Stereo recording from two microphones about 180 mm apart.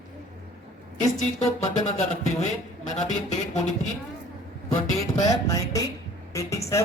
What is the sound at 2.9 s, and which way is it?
Speech, 40° left (ahead or behind).